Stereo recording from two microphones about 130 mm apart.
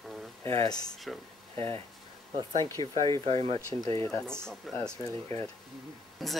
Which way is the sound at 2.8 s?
45° right (ahead or behind).